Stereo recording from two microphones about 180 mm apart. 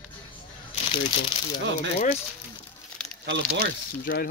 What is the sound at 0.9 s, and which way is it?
Speech, 25° left (ahead or behind).